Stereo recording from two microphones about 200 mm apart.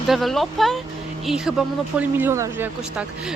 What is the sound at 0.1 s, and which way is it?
Speech, centre (ahead or behind).